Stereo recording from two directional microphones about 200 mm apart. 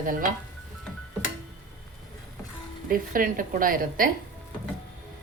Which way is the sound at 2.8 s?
45° right (ahead or behind).